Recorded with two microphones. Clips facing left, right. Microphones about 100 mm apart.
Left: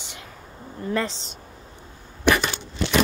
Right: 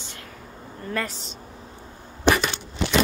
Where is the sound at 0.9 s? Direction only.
25° left (ahead or behind).